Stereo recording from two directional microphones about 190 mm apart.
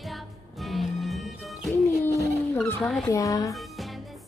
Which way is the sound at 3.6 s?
Centre (ahead or behind).